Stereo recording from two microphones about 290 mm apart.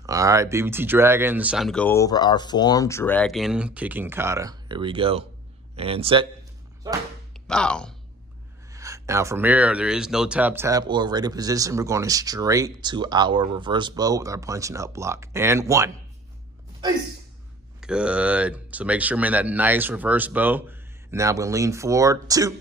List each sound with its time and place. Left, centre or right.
0.0 s speech: centre
7.3 s speech: centre
8.7 s speech: centre
17.7 s speech: centre